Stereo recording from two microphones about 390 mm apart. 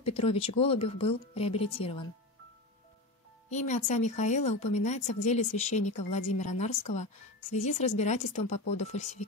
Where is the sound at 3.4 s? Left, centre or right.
Centre.